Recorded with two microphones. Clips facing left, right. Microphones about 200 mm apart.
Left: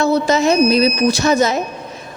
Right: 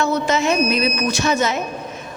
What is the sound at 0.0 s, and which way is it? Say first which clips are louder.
A woman's voice: left 4 dB; 35° left (ahead or behind).